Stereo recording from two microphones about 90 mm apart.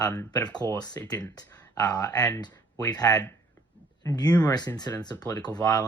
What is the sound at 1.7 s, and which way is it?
Speech, 45° left (ahead or behind).